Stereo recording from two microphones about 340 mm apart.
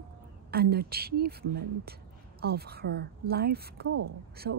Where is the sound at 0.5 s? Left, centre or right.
Right.